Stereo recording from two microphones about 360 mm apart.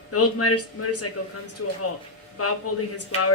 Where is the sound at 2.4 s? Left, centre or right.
Left.